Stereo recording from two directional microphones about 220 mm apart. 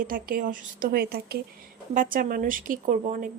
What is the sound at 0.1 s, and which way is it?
A woman's voice, 40° right (ahead or behind).